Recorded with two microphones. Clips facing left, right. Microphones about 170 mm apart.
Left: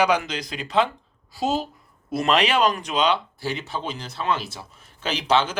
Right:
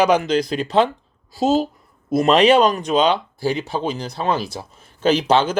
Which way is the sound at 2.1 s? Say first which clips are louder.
Right 7 dB; 40° right (ahead or behind).